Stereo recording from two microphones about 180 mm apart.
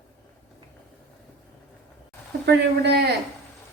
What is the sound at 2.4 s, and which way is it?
Speech, 65° right (ahead or behind).